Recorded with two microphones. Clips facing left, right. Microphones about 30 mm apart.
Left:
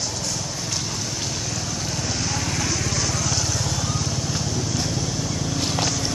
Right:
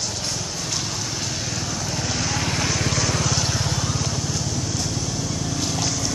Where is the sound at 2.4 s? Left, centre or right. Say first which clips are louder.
Right 2 dB; right.